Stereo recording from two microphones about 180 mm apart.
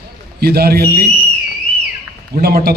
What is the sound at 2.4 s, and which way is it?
Speech, 60° right (ahead or behind).